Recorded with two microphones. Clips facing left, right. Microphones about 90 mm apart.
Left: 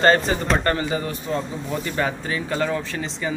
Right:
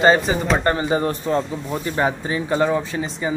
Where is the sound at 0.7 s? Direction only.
25° right (ahead or behind).